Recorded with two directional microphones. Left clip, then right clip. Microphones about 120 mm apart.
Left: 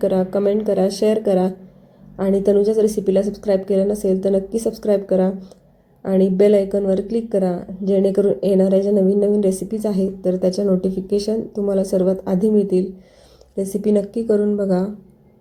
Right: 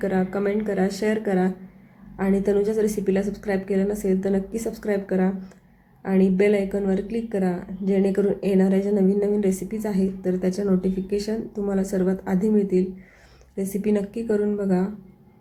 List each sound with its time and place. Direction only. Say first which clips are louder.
0.0 s a woman's voice: left 7 dB; 20° left (ahead or behind)